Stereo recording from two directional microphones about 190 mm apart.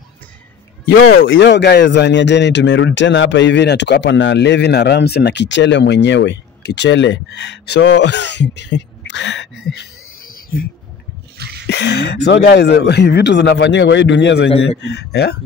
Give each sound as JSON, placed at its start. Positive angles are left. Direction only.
{"t": 0.8, "sound": "speech", "side_deg": 85}
{"t": 11.3, "sound": "a sound", "side_deg": -60}
{"t": 11.7, "sound": "speech", "side_deg": 65}